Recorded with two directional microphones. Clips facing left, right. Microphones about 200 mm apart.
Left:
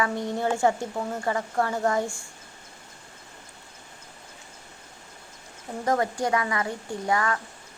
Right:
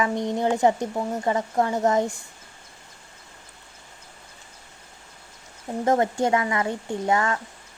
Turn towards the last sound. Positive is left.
turn(degrees=-25)  # may be behind; listen again after turning